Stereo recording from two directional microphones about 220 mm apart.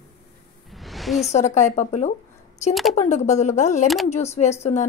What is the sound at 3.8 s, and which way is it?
Speech, centre (ahead or behind).